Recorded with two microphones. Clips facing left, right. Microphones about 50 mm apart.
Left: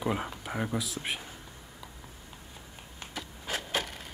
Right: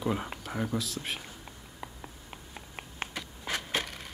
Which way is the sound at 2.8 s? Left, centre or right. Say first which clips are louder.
Right 4 dB; right.